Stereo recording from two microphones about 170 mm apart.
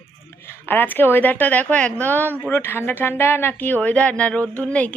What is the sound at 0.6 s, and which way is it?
A woman's voice, 10° left (ahead or behind).